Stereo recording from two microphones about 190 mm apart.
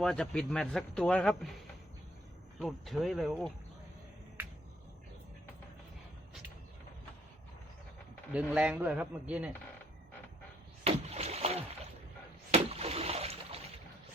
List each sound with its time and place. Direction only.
0.0 s a man's voice: 5° left (ahead or behind)
8.3 s speech: 5° right (ahead or behind)
10.8 s rowboat: 35° right (ahead or behind)
12.5 s a sound: 30° right (ahead or behind)